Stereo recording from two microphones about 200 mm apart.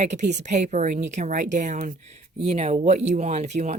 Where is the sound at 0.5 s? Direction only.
35° right (ahead or behind).